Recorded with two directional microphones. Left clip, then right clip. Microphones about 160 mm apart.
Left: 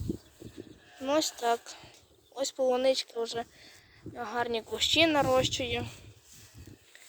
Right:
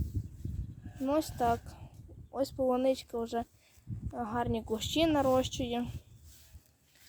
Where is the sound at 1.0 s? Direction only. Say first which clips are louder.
Left 2 dB; centre (ahead or behind).